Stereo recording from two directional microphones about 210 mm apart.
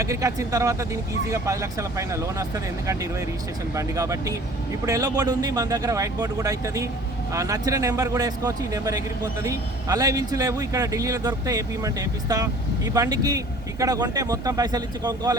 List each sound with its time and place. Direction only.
0.0 s a man's voice: 15° right (ahead or behind)
2.0 s a man's voice: 15° right (ahead or behind)